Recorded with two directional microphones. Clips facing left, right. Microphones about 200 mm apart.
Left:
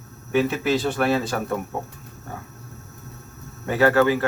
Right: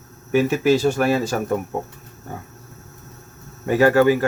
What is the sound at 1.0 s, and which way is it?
Speech, 10° right (ahead or behind).